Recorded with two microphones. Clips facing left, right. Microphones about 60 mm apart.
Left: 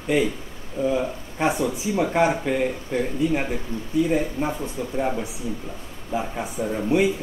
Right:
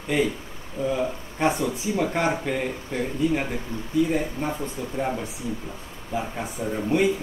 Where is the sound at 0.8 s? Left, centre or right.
Centre.